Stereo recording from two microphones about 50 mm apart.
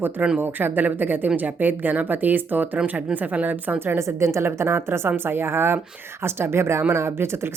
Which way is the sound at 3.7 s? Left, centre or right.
Right.